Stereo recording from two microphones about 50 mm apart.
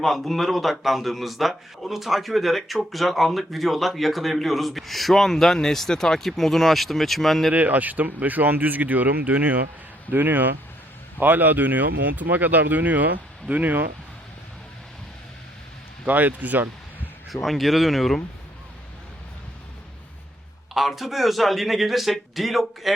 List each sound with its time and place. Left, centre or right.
0.0 s a man's voice: centre
7.5 s speech: right
16.0 s speech: right
17.2 s a man's voice: centre
20.7 s a man's voice: centre